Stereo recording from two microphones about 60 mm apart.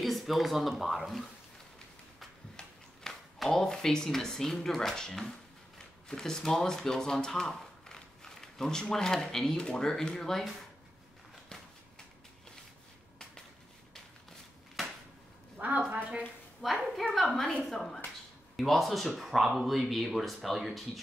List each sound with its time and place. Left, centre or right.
0.0 s speech: centre
2.5 s speech: centre
15.5 s a sound: right
16.6 s speech: centre